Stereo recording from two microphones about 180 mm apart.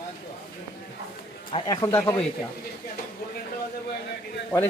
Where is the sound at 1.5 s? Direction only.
25° left (ahead or behind).